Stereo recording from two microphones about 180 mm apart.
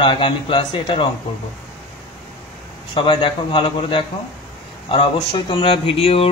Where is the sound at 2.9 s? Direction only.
25° left (ahead or behind).